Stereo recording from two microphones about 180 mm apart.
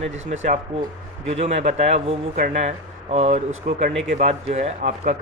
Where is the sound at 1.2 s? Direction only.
35° right (ahead or behind).